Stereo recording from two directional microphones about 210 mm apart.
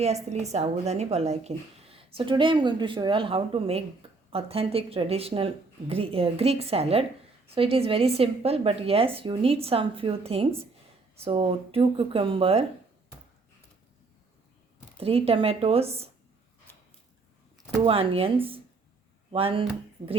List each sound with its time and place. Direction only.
0.3 s speech: 30° right (ahead or behind)
14.9 s speech: 30° right (ahead or behind)
17.8 s speech: 25° right (ahead or behind)